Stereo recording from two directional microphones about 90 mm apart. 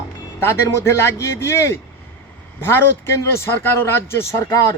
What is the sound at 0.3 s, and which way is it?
A man's voice, 30° left (ahead or behind).